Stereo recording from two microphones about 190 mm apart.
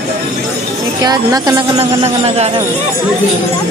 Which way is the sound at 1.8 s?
35° right (ahead or behind).